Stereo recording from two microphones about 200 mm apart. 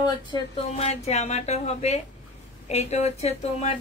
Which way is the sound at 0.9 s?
35° left (ahead or behind).